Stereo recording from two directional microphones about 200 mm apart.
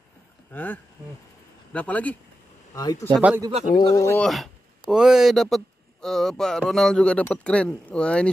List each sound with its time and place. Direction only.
0.5 s speech: 10° left (ahead or behind)
3.1 s speech: 10° right (ahead or behind)
3.7 s speech: 15° left (ahead or behind)
4.2 s speech: centre (ahead or behind)